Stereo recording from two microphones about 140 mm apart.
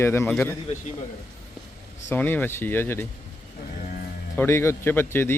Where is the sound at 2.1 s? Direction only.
15° left (ahead or behind).